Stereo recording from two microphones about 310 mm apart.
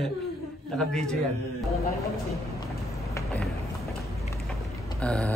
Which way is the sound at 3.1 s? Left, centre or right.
Centre.